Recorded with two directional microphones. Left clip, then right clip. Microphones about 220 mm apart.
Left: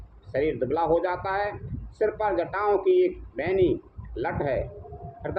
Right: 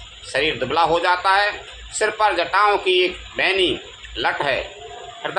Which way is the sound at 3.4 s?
5° left (ahead or behind).